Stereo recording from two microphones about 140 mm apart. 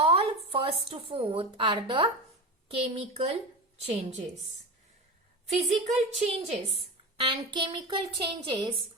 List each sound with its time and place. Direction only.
0.0 s speech: 40° right (ahead or behind)
2.6 s a woman's voice: 45° right (ahead or behind)
5.5 s a woman's voice: 50° right (ahead or behind)
7.2 s speech: 35° right (ahead or behind)